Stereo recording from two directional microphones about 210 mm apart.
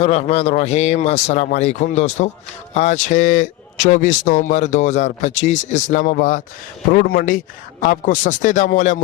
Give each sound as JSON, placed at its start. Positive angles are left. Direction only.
{"t": 0.0, "sound": "speech", "side_deg": 30}